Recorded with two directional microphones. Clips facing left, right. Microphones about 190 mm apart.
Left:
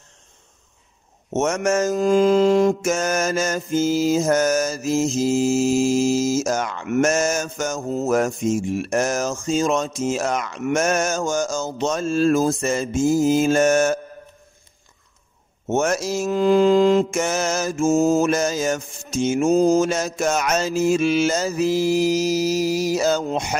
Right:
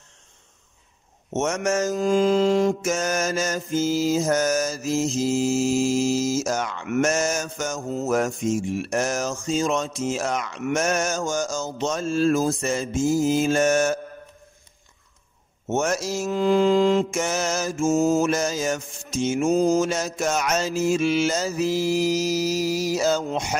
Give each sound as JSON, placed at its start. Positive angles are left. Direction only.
{"t": 1.3, "sound": "mantra", "side_deg": 50}
{"t": 15.6, "sound": "mantra", "side_deg": 55}